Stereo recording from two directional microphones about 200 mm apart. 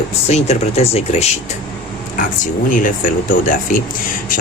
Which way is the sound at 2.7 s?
40° left (ahead or behind).